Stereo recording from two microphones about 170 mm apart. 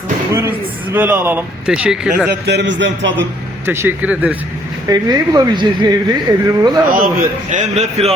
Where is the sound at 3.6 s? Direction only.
15° right (ahead or behind).